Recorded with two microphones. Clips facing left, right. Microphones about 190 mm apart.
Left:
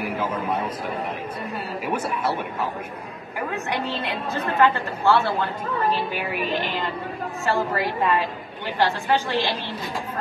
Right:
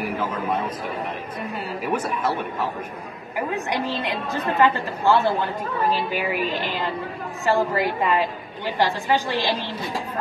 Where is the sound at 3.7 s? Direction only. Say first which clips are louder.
Right 1 dB; 15° right (ahead or behind).